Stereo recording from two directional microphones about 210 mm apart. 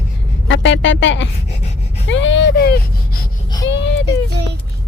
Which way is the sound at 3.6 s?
60° left (ahead or behind).